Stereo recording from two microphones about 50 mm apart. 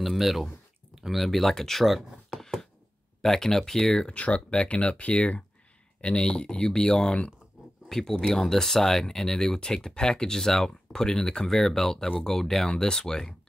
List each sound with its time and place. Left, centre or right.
0.0 s speech: centre
2.3 s a sound: centre
3.2 s speech: centre
4.1 s speech: left